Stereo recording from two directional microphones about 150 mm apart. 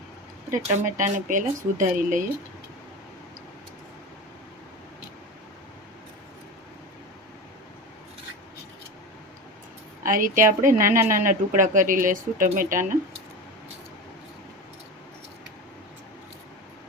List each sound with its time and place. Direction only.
0.5 s speech: 60° right (ahead or behind)
10.0 s speech: 65° right (ahead or behind)